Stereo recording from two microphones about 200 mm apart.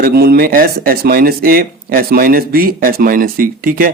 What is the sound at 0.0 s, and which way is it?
Speech, 50° right (ahead or behind).